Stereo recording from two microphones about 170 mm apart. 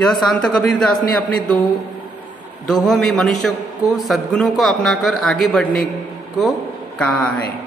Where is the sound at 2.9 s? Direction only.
Centre (ahead or behind).